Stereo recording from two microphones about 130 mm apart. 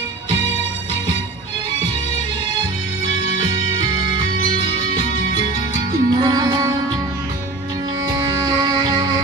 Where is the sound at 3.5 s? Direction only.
35° right (ahead or behind).